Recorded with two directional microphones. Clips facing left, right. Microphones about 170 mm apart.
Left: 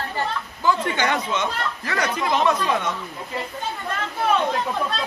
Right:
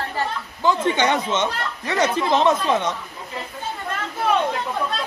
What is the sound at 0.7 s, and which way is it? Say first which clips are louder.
Speech: right 3 dB; 20° right (ahead or behind).